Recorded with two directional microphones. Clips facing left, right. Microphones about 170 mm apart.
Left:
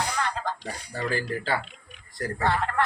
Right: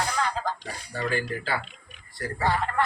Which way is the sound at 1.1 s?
35° left (ahead or behind).